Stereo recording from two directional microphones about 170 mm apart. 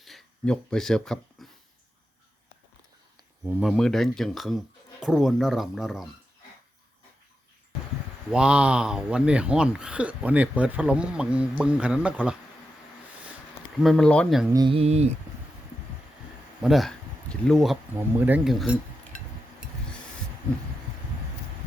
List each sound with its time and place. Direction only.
0.0 s a sound: centre (ahead or behind)
3.4 s speech: 5° right (ahead or behind)
8.3 s speech: 5° right (ahead or behind)
13.8 s speech: 5° left (ahead or behind)
14.5 s speech: 30° right (ahead or behind)
16.6 s speech: centre (ahead or behind)
17.9 s speech: 10° right (ahead or behind)